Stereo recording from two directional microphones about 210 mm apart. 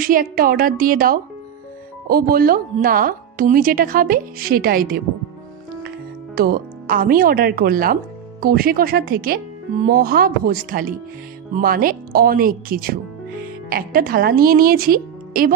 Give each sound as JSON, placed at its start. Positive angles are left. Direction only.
{"t": 0.0, "sound": "speech", "side_deg": -40}
{"t": 6.3, "sound": "a woman's voice", "side_deg": -45}